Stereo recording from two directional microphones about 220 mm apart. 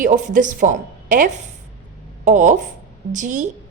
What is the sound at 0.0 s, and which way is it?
A woman's voice, 35° right (ahead or behind).